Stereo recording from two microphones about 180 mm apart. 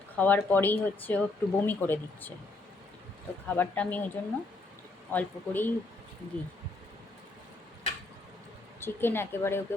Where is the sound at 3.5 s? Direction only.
10° left (ahead or behind).